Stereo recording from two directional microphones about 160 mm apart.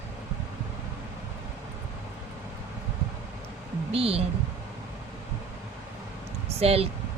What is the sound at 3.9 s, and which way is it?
Speech, 40° right (ahead or behind).